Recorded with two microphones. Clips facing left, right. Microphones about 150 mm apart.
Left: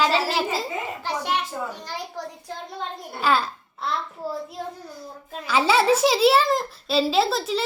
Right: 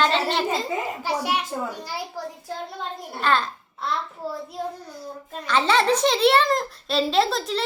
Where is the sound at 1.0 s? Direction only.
10° right (ahead or behind).